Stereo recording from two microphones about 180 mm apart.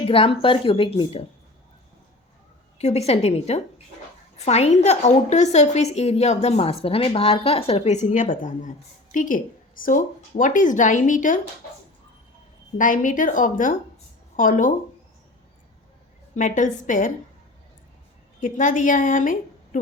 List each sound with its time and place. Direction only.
0.1 s a woman's voice: 30° left (ahead or behind)
2.7 s a woman's voice: 35° left (ahead or behind)
12.7 s a woman's voice: 45° left (ahead or behind)
16.3 s a woman's voice: 45° left (ahead or behind)
18.3 s a woman's voice: 45° left (ahead or behind)